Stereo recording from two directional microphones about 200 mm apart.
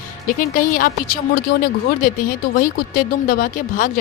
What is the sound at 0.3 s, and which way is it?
Speech, 45° left (ahead or behind).